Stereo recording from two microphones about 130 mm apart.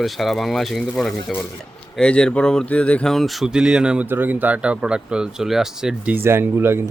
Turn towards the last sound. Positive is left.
turn(degrees=-20)  # may be behind; listen again after turning